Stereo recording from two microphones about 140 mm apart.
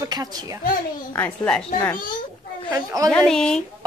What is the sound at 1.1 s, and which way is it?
Speech, 10° left (ahead or behind).